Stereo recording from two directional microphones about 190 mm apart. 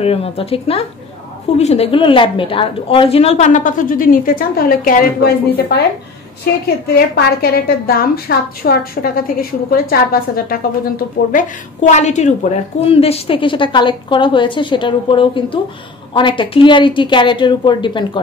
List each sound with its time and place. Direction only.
0.0 s a woman's voice: 30° left (ahead or behind); by 5.9 s 60° left (ahead or behind)
6.9 s a woman's voice: 55° left (ahead or behind)
11.3 s a woman's voice: 40° left (ahead or behind)